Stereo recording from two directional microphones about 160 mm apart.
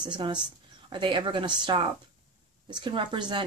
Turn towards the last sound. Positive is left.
turn(degrees=-30)  # may be behind; listen again after turning